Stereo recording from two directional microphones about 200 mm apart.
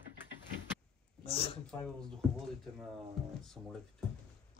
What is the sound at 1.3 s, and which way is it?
Speech, 30° left (ahead or behind).